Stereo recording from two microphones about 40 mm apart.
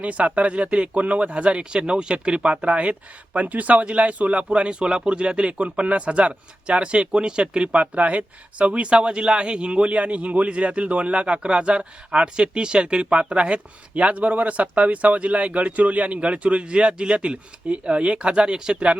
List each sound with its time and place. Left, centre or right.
0.0 s speech: right